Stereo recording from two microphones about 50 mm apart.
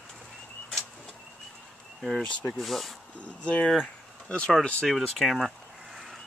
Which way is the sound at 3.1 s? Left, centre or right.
Left.